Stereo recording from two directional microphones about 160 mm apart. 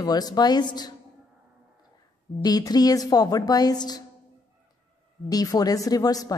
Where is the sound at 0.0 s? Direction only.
25° left (ahead or behind).